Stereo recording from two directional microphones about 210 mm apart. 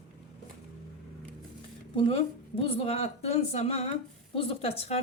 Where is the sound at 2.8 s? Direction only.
30° left (ahead or behind).